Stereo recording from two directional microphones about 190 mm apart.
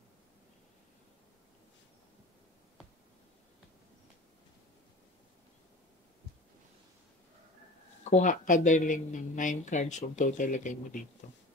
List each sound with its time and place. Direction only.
8.0 s speech: 40° left (ahead or behind)